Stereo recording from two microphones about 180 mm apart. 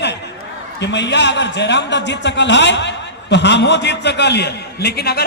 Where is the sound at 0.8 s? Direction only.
75° left (ahead or behind).